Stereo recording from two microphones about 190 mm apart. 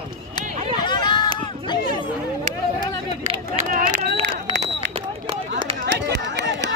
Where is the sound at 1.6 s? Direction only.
25° left (ahead or behind).